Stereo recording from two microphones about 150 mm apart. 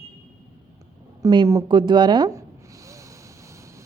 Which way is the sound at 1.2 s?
25° right (ahead or behind).